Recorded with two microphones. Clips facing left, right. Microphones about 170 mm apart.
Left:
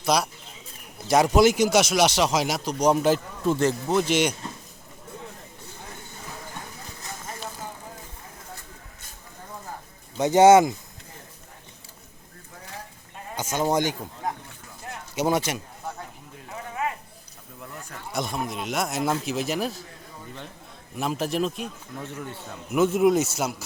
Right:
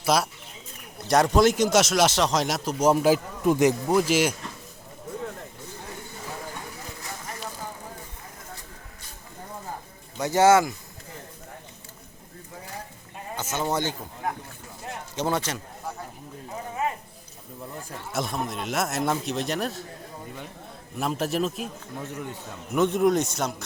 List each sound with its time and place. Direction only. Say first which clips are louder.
0.0 s speech: even; centre (ahead or behind)
3.9 s speech: right 1 dB; 5° right (ahead or behind)
10.2 s speech: left 4 dB; 20° left (ahead or behind)
13.3 s a man's voice: left 3 dB; 15° left (ahead or behind)
18.1 s speech: even; centre (ahead or behind)
20.9 s speech: even; centre (ahead or behind)
22.0 s speech: right 1 dB; 10° right (ahead or behind)
22.7 s speech: left 2 dB; 5° left (ahead or behind)